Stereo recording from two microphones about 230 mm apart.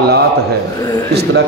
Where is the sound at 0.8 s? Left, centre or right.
Centre.